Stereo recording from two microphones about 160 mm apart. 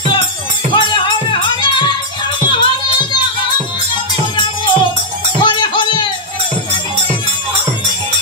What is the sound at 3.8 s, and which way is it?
Music, 30° left (ahead or behind).